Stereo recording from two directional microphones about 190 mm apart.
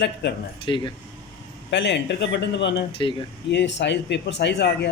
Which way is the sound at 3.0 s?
25° left (ahead or behind).